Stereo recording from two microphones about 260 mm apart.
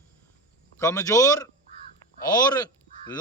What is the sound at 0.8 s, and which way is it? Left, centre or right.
Speech, centre.